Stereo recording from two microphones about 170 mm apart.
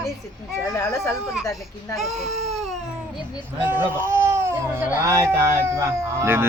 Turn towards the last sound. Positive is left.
turn(degrees=-15)  # may be behind; listen again after turning